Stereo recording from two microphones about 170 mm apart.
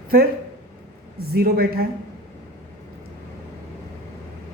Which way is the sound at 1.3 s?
60° right (ahead or behind).